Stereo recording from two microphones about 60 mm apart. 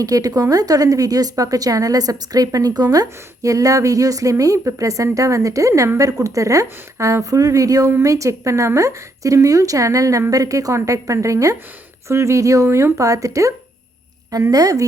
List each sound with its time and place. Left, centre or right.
0.0 s a woman's voice: right
14.5 s a woman's voice: right